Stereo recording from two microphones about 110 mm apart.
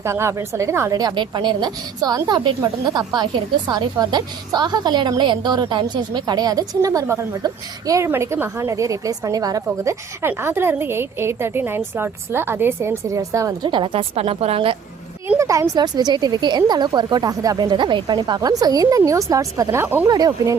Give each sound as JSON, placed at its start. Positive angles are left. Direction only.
{"t": 0.0, "sound": "a woman's voice", "side_deg": -25}
{"t": 9.8, "sound": "a woman's voice", "side_deg": -25}
{"t": 13.7, "sound": "a woman's voice", "side_deg": -50}
{"t": 15.4, "sound": "a woman's voice", "side_deg": -30}
{"t": 20.1, "sound": "a woman's voice", "side_deg": -35}